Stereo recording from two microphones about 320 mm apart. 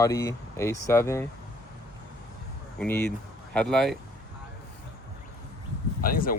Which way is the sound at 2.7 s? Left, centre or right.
Centre.